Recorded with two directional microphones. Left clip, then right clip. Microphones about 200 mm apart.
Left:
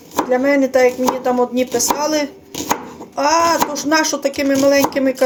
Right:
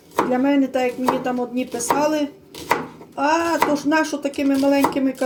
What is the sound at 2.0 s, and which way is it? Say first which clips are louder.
Speech: left 2 dB; centre (ahead or behind).